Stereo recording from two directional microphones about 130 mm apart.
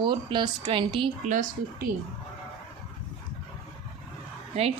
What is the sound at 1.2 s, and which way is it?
Speech, 80° right.